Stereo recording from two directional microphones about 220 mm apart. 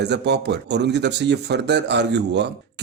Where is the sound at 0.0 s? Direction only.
50° right (ahead or behind).